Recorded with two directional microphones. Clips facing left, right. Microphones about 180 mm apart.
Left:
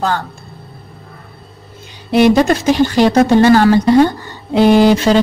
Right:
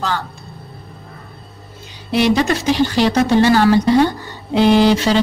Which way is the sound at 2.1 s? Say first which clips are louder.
Left 5 dB; 50° left (ahead or behind).